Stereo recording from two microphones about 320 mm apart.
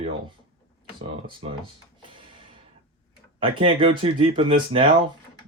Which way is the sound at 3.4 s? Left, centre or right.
Centre.